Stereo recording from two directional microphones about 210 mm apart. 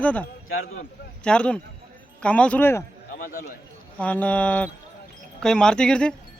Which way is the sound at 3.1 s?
40° left (ahead or behind).